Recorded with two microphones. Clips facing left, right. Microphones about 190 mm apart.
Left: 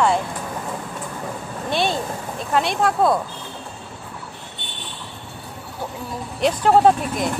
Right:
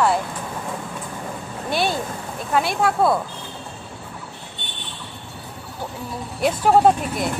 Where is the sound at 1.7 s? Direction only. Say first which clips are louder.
Left 1 dB; 5° right (ahead or behind).